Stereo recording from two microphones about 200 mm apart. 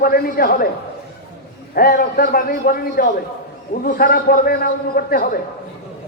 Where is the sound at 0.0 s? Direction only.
50° left (ahead or behind).